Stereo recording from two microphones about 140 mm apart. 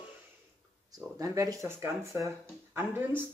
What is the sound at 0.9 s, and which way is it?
Speech, 25° right (ahead or behind).